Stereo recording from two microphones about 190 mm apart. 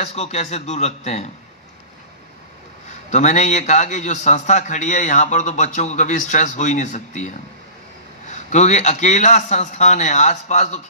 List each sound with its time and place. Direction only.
0.0 s a man's voice: 35° left (ahead or behind)
3.1 s a man's voice: 35° left (ahead or behind)